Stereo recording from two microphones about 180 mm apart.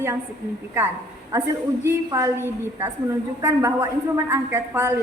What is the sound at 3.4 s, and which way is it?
A woman's voice, 15° right (ahead or behind).